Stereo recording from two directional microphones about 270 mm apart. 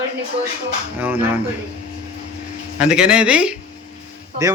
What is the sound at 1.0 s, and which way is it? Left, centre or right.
Speech, centre.